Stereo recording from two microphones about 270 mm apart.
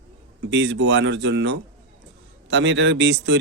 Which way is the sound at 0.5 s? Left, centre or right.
Right.